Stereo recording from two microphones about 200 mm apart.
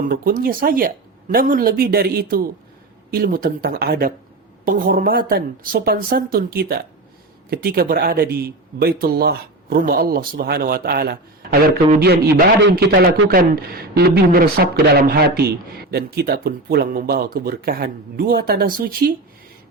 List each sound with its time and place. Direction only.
0.0 s a man's voice: 45° right (ahead or behind)